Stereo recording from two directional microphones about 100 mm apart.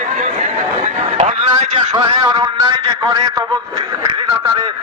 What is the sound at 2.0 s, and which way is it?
Speech, 45° right (ahead or behind).